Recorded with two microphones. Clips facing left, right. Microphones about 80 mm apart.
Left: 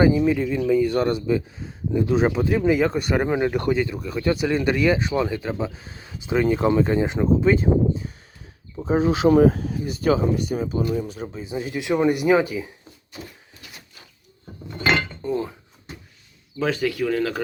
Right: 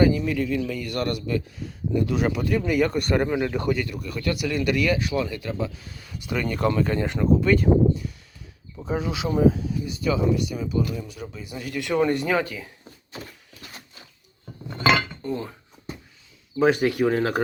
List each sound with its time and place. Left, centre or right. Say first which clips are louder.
0.3 s speech: left 5 dB; left
3.0 s speech: even; centre
3.2 s speech: left 3 dB; left
9.3 s speech: right 1 dB; left; by 12.7 s centre
15.2 s speech: left 4 dB; centre
16.6 s speech: right 3 dB; right